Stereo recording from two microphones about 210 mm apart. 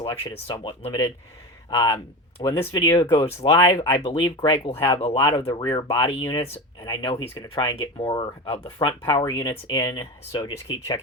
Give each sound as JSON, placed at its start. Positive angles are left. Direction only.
{"t": 0.0, "sound": "speech", "side_deg": 20}